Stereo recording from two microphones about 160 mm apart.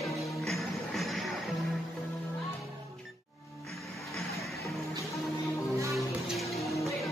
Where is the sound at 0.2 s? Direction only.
Centre (ahead or behind).